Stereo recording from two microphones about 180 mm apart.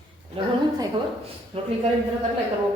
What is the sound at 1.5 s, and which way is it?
Speech, 35° right (ahead or behind).